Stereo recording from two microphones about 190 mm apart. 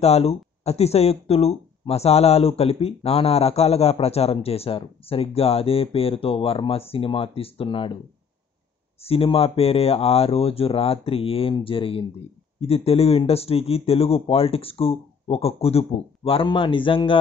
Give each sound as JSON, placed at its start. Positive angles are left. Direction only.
{"t": 0.0, "sound": "speech", "side_deg": 30}
{"t": 9.0, "sound": "a man's voice", "side_deg": 30}